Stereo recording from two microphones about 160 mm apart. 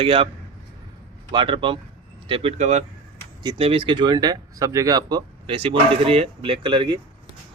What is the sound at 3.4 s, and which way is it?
A man's voice, 35° right (ahead or behind).